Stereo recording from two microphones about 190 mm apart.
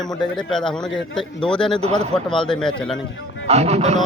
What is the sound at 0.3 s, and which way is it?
Speech, 5° left (ahead or behind).